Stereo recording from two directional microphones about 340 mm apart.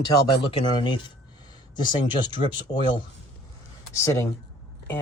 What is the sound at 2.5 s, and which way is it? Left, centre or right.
Speech, centre.